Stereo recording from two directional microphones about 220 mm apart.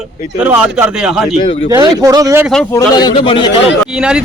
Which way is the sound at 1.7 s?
15° right (ahead or behind).